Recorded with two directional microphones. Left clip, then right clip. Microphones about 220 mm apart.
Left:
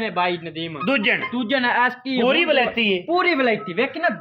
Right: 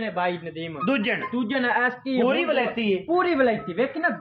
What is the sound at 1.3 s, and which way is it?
A woman's voice, 50° left (ahead or behind).